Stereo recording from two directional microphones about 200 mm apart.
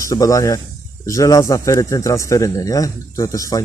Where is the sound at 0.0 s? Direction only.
15° left (ahead or behind).